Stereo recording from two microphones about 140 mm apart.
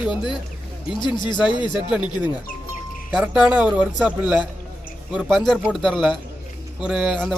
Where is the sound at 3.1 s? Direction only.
5° right (ahead or behind).